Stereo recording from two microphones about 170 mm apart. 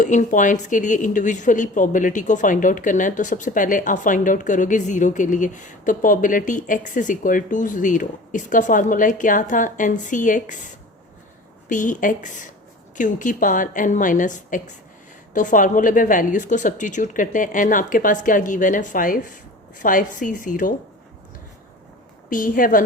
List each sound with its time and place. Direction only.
0.0 s a woman's voice: 50° left (ahead or behind)
11.7 s a woman's voice: 50° left (ahead or behind)
22.3 s a woman's voice: 55° left (ahead or behind)